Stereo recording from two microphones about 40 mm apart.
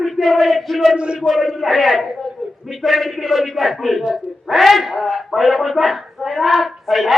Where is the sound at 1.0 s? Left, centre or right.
Right.